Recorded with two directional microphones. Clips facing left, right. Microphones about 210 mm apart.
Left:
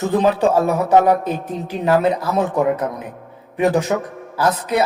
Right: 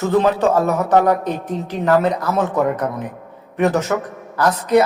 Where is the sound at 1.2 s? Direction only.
10° left (ahead or behind).